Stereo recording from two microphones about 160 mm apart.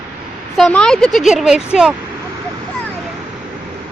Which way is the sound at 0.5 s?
5° left (ahead or behind).